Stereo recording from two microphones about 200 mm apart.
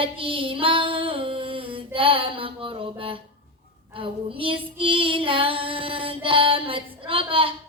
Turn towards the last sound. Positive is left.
turn(degrees=-25)  # may be behind; listen again after turning